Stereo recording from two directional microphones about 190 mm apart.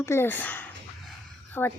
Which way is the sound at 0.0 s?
15° left (ahead or behind).